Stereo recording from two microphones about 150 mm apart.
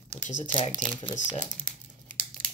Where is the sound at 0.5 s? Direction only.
35° left (ahead or behind).